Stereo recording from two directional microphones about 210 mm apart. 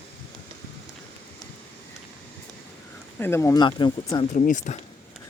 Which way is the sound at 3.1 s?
10° left (ahead or behind).